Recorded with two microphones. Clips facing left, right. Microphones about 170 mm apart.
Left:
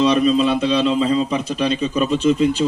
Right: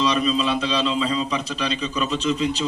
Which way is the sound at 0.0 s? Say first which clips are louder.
Left 6 dB; 55° left (ahead or behind).